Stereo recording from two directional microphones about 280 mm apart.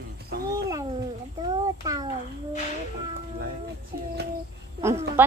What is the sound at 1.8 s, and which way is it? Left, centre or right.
Speech, centre.